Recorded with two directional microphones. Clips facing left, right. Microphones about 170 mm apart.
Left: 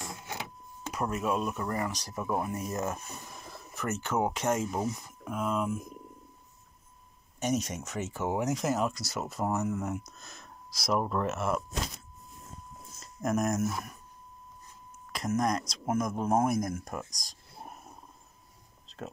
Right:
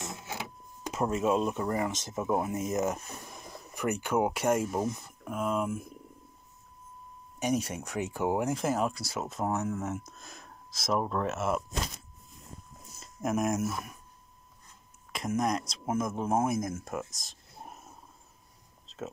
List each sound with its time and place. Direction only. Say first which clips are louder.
0.9 s speech: right 3 dB; 25° right (ahead or behind); by 4.7 s 10° right (ahead or behind)
4.7 s speech: right 1 dB; 10° left (ahead or behind)
5.3 s speech: even; 5° right (ahead or behind)
7.3 s speech: right 1 dB; 10° right (ahead or behind)
13.0 s speech: even; 5° right (ahead or behind)
15.1 s speech: left 1 dB; 5° right (ahead or behind)